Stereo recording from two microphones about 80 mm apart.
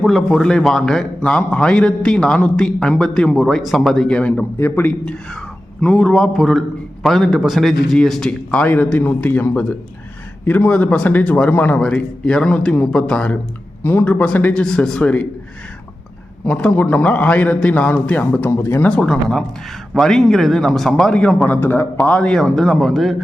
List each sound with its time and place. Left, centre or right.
0.0 s a man's voice: centre
4.5 s a man's voice: left
5.8 s a man's voice: centre
14.5 s a man's voice: centre
15.0 s a man's voice: centre
16.5 s a man's voice: centre
18.5 s a man's voice: left
18.9 s a man's voice: centre
21.4 s a man's voice: left
21.9 s speech: centre